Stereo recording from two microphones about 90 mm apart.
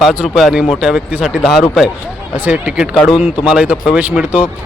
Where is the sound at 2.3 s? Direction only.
20° right (ahead or behind).